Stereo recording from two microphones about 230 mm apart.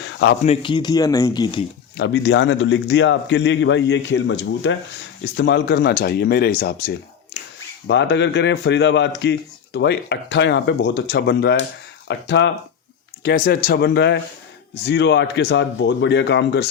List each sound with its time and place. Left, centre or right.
0.0 s a sound: left
0.4 s speech: left
2.0 s speech: left
7.9 s speech: left
13.2 s speech: left